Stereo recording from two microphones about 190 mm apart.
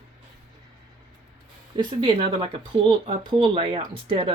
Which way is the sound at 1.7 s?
25° right (ahead or behind).